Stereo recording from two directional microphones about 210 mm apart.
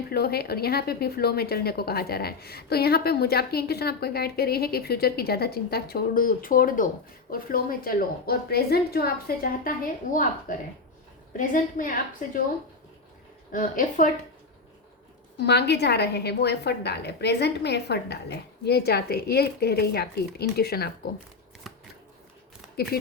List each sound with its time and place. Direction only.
0.1 s speech: 50° left (ahead or behind)
11.3 s a woman's voice: 40° left (ahead or behind)
13.5 s a woman's voice: 40° left (ahead or behind)
15.4 s speech: 50° left (ahead or behind)